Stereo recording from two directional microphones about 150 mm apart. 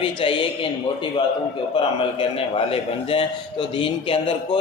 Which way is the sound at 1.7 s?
35° left (ahead or behind).